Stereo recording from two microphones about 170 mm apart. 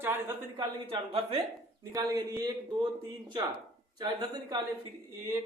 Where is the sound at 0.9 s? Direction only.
30° right (ahead or behind).